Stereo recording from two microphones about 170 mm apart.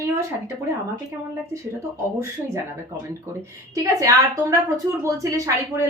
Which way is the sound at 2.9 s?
20° right (ahead or behind).